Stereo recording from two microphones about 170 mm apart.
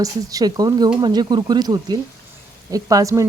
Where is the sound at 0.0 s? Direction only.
20° right (ahead or behind).